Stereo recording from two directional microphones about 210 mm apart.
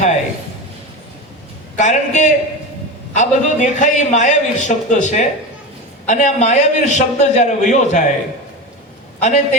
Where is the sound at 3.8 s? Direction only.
35° left (ahead or behind).